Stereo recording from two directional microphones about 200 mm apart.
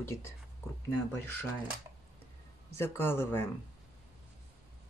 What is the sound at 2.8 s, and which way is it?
Speech, 10° left (ahead or behind).